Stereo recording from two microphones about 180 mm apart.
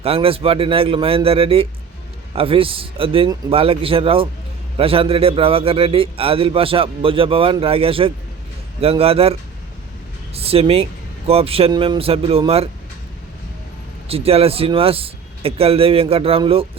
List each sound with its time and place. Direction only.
0.0 s a man's voice: 30° right (ahead or behind)
14.1 s a man's voice: 35° right (ahead or behind)